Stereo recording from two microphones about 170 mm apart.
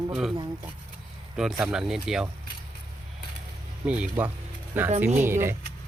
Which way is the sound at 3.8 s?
10° right (ahead or behind).